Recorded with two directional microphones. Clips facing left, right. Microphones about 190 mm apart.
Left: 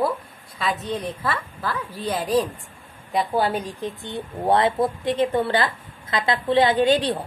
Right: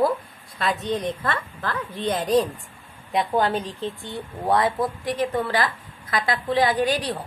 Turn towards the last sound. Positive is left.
turn(degrees=25)  # may be behind; listen again after turning